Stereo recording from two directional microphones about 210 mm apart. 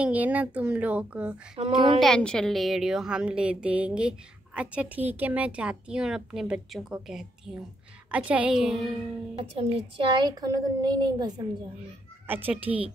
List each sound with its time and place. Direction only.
0.0 s a woman's voice: 5° right (ahead or behind)
1.6 s a woman's voice: 25° right (ahead or behind)
2.0 s a woman's voice: 5° left (ahead or behind)
9.4 s a woman's voice: 25° right (ahead or behind)